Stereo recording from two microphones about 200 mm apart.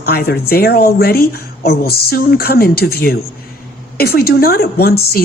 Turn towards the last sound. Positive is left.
turn(degrees=50)  # may be behind; listen again after turning